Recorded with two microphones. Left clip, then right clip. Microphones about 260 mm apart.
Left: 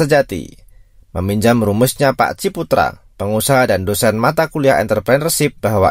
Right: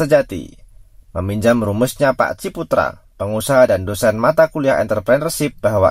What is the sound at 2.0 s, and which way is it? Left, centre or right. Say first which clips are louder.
Speech: even; left.